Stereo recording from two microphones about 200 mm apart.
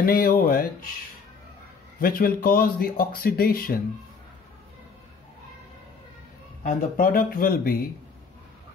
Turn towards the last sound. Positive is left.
turn(degrees=50)  # may be behind; listen again after turning